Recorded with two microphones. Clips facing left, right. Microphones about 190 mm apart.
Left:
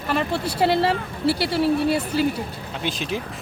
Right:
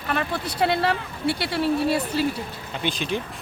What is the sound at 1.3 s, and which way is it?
Speech, centre (ahead or behind).